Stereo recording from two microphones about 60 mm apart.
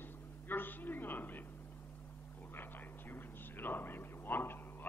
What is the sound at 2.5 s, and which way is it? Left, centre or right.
Whispering, left.